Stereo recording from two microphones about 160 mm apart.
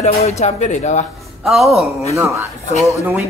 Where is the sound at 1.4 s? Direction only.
Centre (ahead or behind).